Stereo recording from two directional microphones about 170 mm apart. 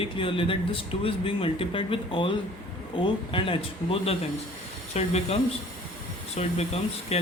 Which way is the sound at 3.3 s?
30° left (ahead or behind).